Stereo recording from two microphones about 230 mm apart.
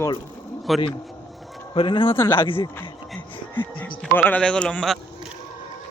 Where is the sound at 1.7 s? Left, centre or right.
Left.